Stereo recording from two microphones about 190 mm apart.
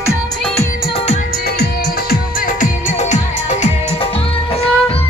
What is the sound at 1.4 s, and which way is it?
Music, 55° left (ahead or behind).